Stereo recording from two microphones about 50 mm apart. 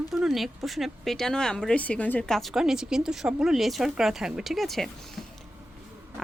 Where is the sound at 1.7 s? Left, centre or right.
Left.